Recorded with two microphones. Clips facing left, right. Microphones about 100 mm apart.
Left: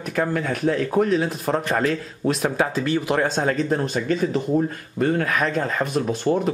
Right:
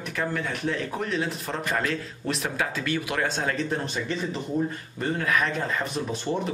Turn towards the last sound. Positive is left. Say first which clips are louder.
# left 7 dB
turn(degrees=45)  # may be behind; listen again after turning